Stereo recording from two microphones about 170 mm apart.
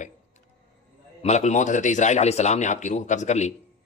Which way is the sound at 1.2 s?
40° left (ahead or behind).